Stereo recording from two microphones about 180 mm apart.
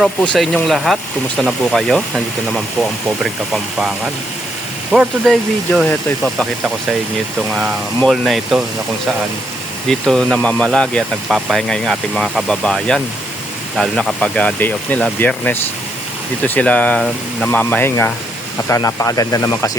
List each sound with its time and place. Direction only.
0.0 s speech: centre (ahead or behind)
8.1 s speech: centre (ahead or behind)
9.9 s speech: 5° left (ahead or behind); by 19.7 s 20° left (ahead or behind)